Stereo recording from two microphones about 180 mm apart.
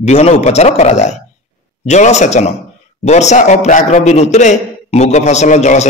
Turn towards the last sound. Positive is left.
turn(degrees=40)  # may be behind; listen again after turning